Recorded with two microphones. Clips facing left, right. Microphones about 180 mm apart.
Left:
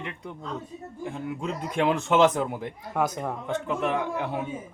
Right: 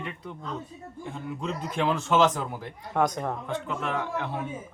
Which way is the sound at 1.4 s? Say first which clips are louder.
Left 2 dB; 15° left (ahead or behind).